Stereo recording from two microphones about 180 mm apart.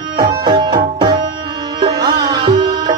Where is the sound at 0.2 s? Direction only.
20° right (ahead or behind).